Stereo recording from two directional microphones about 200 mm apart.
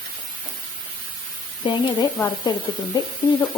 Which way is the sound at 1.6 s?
20° left (ahead or behind).